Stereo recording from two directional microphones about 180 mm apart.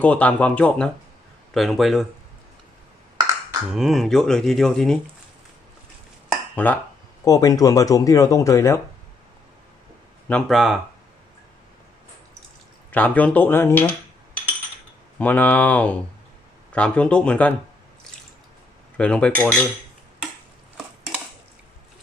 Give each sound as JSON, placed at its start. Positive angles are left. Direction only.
{"t": 0.0, "sound": "speech", "side_deg": 10}
{"t": 3.7, "sound": "speech", "side_deg": 0}
{"t": 6.2, "sound": "dishes", "side_deg": 5}
{"t": 7.2, "sound": "speech", "side_deg": 20}
{"t": 10.2, "sound": "speech", "side_deg": 5}
{"t": 12.9, "sound": "speech", "side_deg": 10}
{"t": 15.1, "sound": "speech", "side_deg": 10}
{"t": 18.9, "sound": "speech", "side_deg": 5}